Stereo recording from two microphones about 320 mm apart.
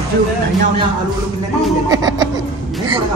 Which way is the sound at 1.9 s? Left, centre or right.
Centre.